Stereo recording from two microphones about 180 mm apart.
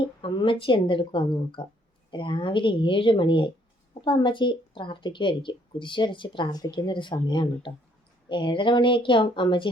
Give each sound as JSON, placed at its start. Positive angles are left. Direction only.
{"t": 0.2, "sound": "a woman's voice", "side_deg": 25}